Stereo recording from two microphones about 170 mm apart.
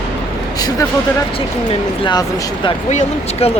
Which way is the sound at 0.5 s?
20° left (ahead or behind).